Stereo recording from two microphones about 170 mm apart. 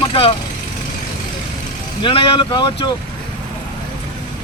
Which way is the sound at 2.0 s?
30° left (ahead or behind).